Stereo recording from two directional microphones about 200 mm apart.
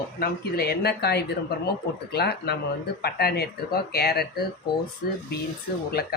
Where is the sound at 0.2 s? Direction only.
50° left (ahead or behind).